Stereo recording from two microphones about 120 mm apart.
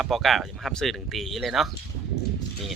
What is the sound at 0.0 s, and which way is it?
Speech, centre (ahead or behind).